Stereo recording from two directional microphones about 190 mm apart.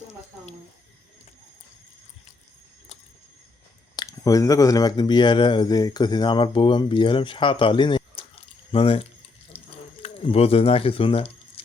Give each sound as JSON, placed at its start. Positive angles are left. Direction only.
{"t": 3.9, "sound": "speech", "side_deg": 20}
{"t": 9.5, "sound": "water", "side_deg": 30}
{"t": 10.0, "sound": "speech", "side_deg": 30}